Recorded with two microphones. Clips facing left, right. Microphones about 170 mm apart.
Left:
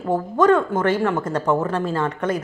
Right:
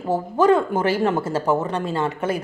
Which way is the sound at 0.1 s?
10° right (ahead or behind).